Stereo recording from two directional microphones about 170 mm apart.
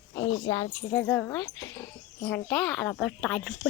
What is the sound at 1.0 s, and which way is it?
Speech, 10° left (ahead or behind).